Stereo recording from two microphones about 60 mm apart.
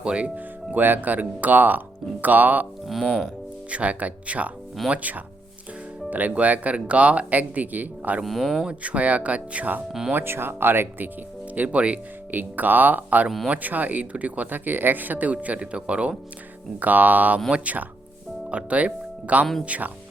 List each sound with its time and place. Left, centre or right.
0.0 s speech: centre
2.8 s speech: centre
3.7 s speech: right
8.2 s speech: centre
8.6 s speech: right
10.1 s speech: right
11.5 s speech: right